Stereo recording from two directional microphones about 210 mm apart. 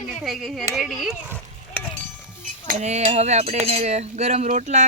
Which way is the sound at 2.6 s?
35° right (ahead or behind).